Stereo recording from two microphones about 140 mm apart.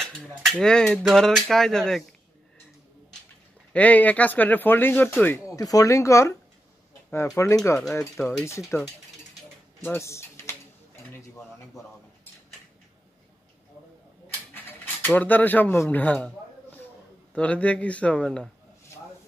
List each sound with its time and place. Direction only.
0.0 s a sound: 5° left (ahead or behind)
0.5 s speech: 5° left (ahead or behind)
3.7 s speech: 10° left (ahead or behind)
5.6 s speech: 25° left (ahead or behind)
7.3 s speech: 20° left (ahead or behind)
11.1 s dishes: 20° left (ahead or behind)
14.5 s speech: 15° left (ahead or behind)
17.3 s speech: 10° left (ahead or behind)